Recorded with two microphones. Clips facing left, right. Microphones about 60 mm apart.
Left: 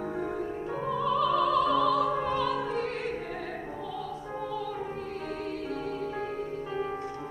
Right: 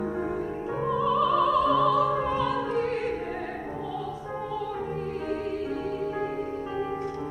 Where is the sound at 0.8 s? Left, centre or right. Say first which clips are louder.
Right 3 dB; centre.